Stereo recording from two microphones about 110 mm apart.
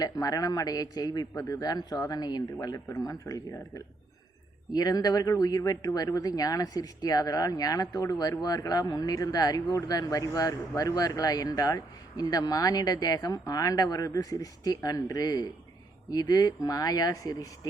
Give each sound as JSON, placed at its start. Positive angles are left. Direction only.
{"t": 0.0, "sound": "speech", "side_deg": 35}